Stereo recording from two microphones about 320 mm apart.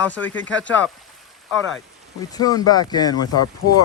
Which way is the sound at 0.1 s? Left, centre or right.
Centre.